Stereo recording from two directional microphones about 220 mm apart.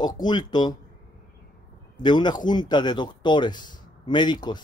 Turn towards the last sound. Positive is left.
turn(degrees=20)  # may be behind; listen again after turning